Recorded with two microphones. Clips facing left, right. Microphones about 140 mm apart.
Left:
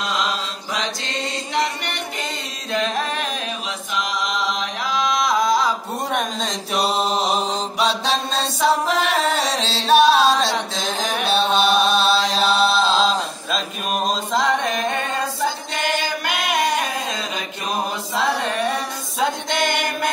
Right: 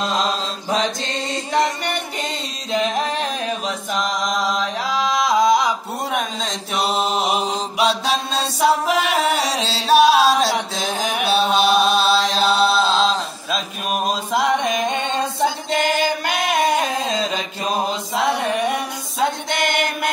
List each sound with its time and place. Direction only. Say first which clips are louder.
0.2 s mantra: right 2 dB; 30° right (ahead or behind)
2.7 s music: right 2 dB; 15° right (ahead or behind)
3.6 s chant: right 3 dB; 40° right (ahead or behind); by 5.7 s 20° right (ahead or behind)
6.1 s mantra: left 1 dB; centre (ahead or behind); by 15.2 s 20° right (ahead or behind)
16.8 s a sound: right 4 dB; 25° right (ahead or behind)
18.1 s chant: right 1 dB; 10° right (ahead or behind)
19.1 s music: right 1 dB; 5° right (ahead or behind)